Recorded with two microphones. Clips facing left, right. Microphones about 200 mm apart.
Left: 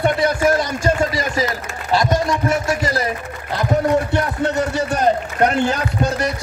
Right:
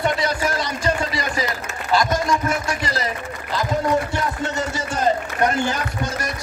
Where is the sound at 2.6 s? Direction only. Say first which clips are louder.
Left 5 dB; 50° left (ahead or behind).